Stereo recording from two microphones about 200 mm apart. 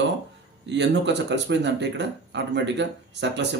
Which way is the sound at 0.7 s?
60° right (ahead or behind).